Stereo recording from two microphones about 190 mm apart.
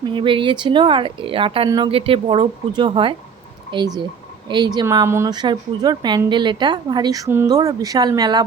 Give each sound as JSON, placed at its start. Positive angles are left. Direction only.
{"t": 0.0, "sound": "a woman's voice", "side_deg": -25}